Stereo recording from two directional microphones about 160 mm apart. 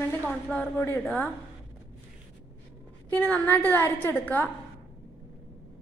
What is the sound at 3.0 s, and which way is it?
A woman's voice, 10° left (ahead or behind).